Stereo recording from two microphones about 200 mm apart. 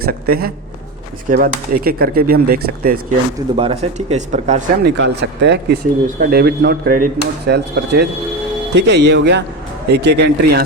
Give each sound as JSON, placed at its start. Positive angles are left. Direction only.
{"t": 0.0, "sound": "speech", "side_deg": -50}
{"t": 3.3, "sound": "speech", "side_deg": -25}
{"t": 4.8, "sound": "speech", "side_deg": -60}
{"t": 6.1, "sound": "speech", "side_deg": -45}